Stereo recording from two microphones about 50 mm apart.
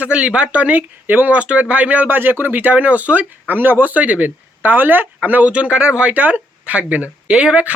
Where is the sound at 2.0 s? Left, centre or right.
Right.